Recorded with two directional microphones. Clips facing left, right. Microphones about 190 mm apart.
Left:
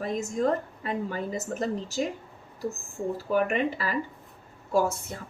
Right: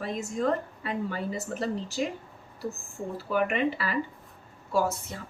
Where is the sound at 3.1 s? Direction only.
40° left (ahead or behind).